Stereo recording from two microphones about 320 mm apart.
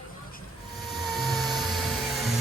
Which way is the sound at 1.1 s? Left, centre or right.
Centre.